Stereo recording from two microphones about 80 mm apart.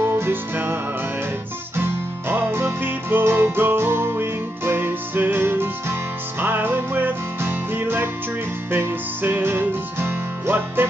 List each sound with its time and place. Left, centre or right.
0.0 s music: right
1.8 s music: right